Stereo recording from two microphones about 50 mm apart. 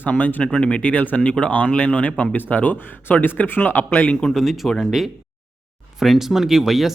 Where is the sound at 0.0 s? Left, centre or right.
Left.